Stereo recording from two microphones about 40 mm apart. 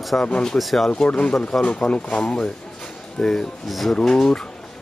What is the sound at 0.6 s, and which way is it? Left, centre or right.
Speech, centre.